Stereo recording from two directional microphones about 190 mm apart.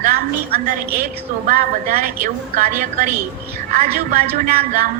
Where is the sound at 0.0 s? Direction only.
50° right (ahead or behind).